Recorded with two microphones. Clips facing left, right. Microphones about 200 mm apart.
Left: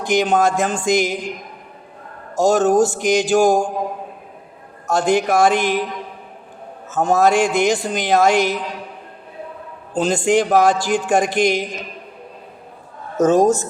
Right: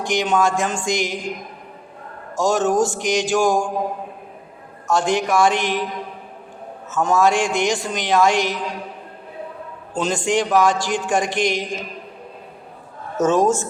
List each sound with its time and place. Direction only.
0.0 s a man's voice: 40° left (ahead or behind)
2.3 s a man's voice: 40° left (ahead or behind)
4.9 s a man's voice: 40° left (ahead or behind)
6.8 s a man's voice: 35° left (ahead or behind)
9.9 s a man's voice: 35° left (ahead or behind)
13.1 s a man's voice: 35° left (ahead or behind)